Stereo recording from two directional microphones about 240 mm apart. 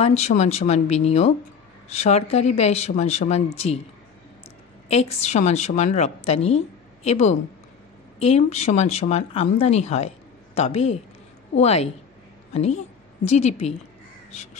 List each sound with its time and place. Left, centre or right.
0.0 s speech: left
4.8 s a woman's voice: left
14.3 s crow: left